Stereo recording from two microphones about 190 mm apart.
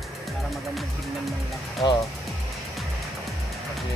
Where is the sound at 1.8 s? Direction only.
25° left (ahead or behind).